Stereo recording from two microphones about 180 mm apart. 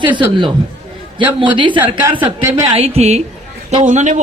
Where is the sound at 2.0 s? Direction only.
10° right (ahead or behind).